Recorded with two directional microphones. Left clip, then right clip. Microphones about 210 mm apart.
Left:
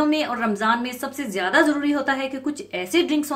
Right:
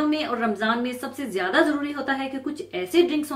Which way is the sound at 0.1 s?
45° left (ahead or behind).